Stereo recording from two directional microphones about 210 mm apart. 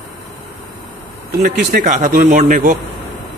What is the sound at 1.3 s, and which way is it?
Speech, 45° right (ahead or behind).